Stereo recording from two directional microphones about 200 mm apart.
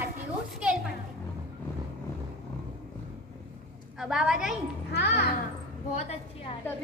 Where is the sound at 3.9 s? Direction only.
5° right (ahead or behind).